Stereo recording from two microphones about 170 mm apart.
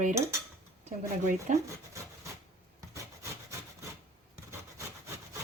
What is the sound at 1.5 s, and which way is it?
Speech, 45° right (ahead or behind).